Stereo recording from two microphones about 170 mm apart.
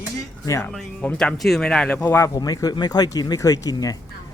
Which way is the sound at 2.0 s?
15° left (ahead or behind).